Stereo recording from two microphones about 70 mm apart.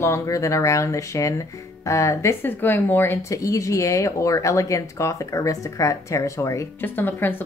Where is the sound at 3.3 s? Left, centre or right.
Left.